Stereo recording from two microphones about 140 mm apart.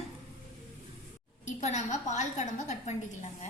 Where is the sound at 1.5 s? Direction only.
55° left (ahead or behind).